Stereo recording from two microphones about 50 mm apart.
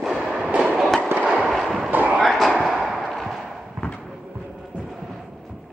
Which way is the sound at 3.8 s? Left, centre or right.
Right.